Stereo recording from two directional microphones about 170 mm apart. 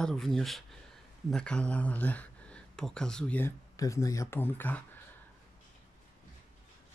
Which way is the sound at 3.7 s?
20° left (ahead or behind).